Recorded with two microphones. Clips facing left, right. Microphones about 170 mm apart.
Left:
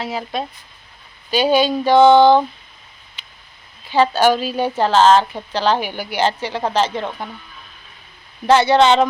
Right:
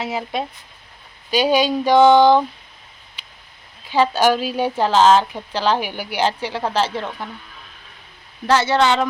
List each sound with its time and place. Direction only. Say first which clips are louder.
0.0 s speech: even; 20° right (ahead or behind)
1.3 s speech: left 1 dB; 10° right (ahead or behind)
3.2 s a sound: even; 10° right (ahead or behind)
3.8 s a woman's voice: left 2 dB; 10° right (ahead or behind)
8.4 s speech: left 4 dB; 20° left (ahead or behind)